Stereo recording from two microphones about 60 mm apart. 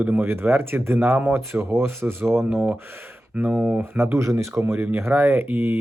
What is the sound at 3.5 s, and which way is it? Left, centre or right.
Speech, centre.